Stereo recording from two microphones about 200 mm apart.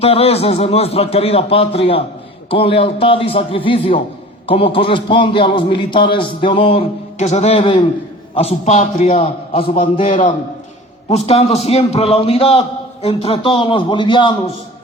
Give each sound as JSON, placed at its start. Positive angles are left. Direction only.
{"t": 0.0, "sound": "a man's voice", "side_deg": 30}
{"t": 11.1, "sound": "a man's voice", "side_deg": 30}